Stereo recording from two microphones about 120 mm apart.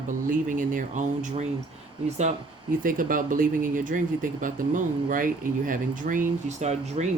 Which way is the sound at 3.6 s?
90° right.